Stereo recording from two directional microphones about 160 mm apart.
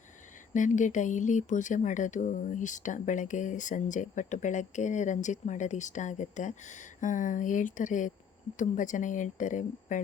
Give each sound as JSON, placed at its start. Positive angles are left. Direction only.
{"t": 0.5, "sound": "speech", "side_deg": 50}